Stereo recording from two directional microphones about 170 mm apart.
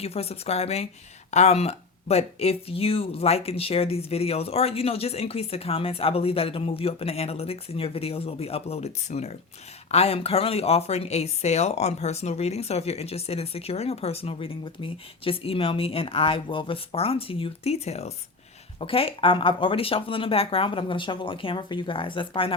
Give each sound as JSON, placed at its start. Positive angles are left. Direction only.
{"t": 0.0, "sound": "speech", "side_deg": 35}